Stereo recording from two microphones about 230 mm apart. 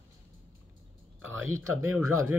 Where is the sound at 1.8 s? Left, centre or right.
Centre.